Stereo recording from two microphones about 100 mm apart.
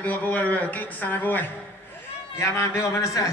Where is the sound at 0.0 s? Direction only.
15° left (ahead or behind).